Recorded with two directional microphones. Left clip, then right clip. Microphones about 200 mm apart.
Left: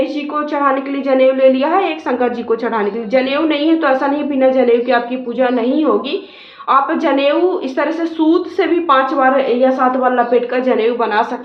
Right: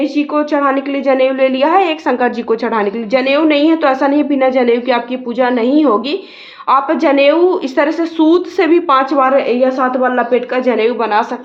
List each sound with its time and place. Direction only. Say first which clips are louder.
0.0 s a woman's voice: right 3 dB; 50° right (ahead or behind)